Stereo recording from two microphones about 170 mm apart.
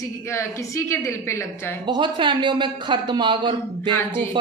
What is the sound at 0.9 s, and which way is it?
Speech, 15° left (ahead or behind).